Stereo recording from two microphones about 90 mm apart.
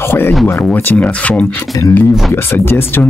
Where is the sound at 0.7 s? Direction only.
15° left (ahead or behind).